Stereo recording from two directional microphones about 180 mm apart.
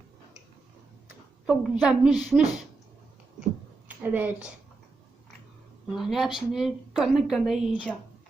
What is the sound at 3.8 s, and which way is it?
Speech, 10° right (ahead or behind).